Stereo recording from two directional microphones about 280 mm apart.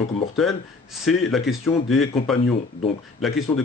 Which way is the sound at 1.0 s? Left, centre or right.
Centre.